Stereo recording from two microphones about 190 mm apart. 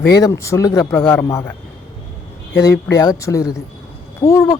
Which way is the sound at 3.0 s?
15° left (ahead or behind).